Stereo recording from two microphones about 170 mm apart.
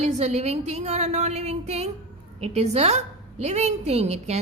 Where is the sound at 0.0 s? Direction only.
40° right (ahead or behind).